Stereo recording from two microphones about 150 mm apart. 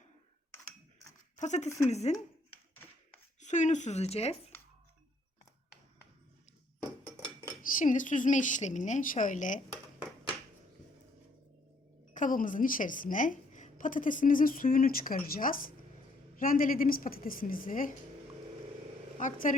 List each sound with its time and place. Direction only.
1.4 s speech: 50° left (ahead or behind)
3.4 s speech: 55° left (ahead or behind)
7.6 s a woman's voice: 60° left (ahead or behind)
12.1 s a woman's voice: 60° left (ahead or behind)
19.2 s a woman's voice: 60° left (ahead or behind)